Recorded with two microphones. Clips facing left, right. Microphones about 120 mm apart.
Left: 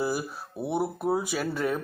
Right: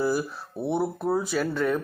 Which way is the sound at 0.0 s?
10° left (ahead or behind).